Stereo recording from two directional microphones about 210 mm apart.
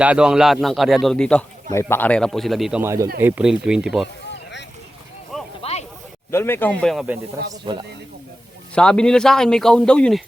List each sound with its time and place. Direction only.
0.0 s speech: 5° right (ahead or behind)
5.3 s a sound: centre (ahead or behind)
6.3 s speech: 10° left (ahead or behind)
7.5 s speech: 20° right (ahead or behind)
8.7 s speech: 5° left (ahead or behind)